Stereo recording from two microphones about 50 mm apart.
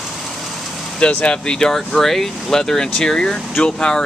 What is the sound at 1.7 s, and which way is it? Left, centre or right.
Speech, centre.